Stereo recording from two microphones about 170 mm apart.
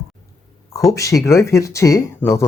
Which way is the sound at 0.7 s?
20° left (ahead or behind).